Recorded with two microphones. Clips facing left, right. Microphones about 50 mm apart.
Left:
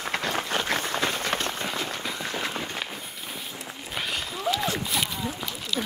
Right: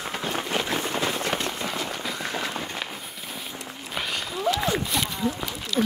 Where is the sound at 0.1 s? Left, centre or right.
Left.